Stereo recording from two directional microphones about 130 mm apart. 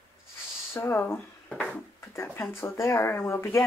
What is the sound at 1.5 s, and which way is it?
Speech, 10° left (ahead or behind).